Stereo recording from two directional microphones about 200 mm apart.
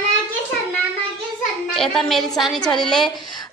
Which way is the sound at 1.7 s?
Centre (ahead or behind).